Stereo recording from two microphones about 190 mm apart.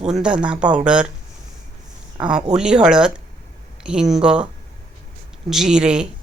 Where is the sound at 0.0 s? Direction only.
5° right (ahead or behind).